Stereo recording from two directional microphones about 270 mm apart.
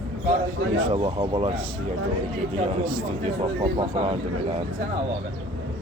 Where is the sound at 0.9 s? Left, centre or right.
Centre.